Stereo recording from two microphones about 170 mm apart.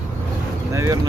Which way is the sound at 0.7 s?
20° right (ahead or behind).